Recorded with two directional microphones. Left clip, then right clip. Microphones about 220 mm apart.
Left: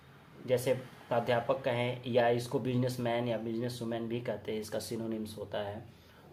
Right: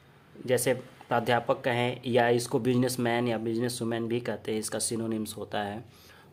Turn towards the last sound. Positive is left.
turn(degrees=-45)  # may be behind; listen again after turning